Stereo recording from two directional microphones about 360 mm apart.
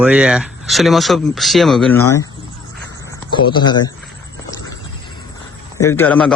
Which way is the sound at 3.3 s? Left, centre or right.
Centre.